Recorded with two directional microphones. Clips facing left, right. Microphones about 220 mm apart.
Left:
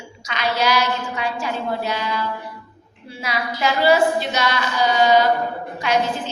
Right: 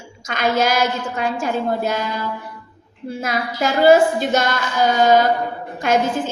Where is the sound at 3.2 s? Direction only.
50° right (ahead or behind).